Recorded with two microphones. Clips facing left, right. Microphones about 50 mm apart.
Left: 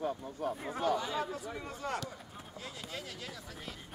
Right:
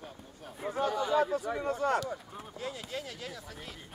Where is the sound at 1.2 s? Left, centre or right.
Right.